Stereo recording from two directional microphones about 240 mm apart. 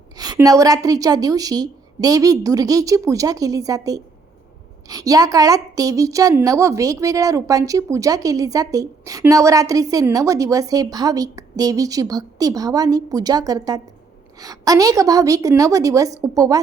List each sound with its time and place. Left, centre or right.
0.2 s a woman's voice: centre